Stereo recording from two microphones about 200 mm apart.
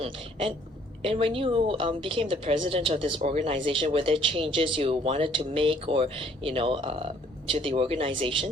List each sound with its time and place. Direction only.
0.0 s speech: 30° right (ahead or behind)